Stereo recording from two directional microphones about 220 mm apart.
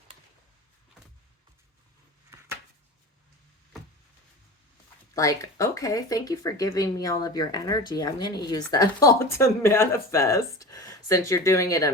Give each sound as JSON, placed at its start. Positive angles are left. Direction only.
{"t": 5.1, "sound": "speech", "side_deg": 15}